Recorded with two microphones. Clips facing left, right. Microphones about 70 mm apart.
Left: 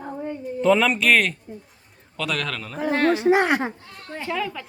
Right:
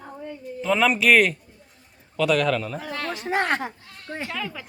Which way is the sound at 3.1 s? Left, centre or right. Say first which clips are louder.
Left 3 dB; centre.